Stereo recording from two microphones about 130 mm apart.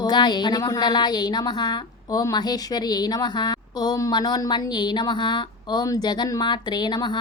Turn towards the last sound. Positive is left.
turn(degrees=35)  # may be behind; listen again after turning